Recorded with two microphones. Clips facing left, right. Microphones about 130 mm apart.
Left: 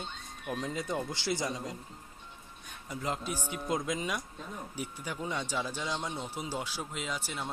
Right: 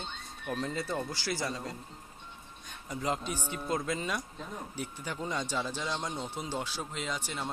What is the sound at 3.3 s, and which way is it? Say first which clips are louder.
Speech: even; 10° left (ahead or behind).